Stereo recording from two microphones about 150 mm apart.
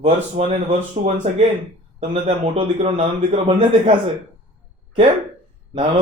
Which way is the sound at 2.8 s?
40° right (ahead or behind).